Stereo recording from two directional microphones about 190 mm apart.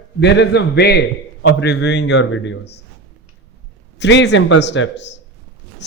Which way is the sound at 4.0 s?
70° left (ahead or behind).